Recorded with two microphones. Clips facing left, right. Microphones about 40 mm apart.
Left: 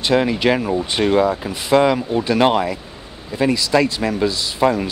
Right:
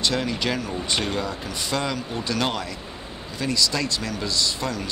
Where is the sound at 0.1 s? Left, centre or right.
Left.